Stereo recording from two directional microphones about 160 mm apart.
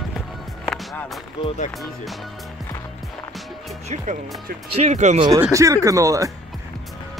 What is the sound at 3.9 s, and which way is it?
Speech, 45° right (ahead or behind).